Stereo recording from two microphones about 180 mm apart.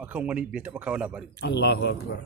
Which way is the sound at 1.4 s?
65° left (ahead or behind).